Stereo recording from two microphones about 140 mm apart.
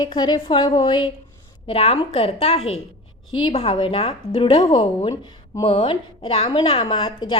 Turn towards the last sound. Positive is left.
turn(degrees=40)  # may be behind; listen again after turning